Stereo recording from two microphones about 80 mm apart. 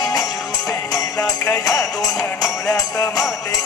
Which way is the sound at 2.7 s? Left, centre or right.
Left.